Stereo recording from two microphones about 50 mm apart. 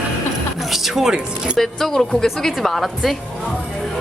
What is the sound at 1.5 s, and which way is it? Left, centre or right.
A woman's voice, centre.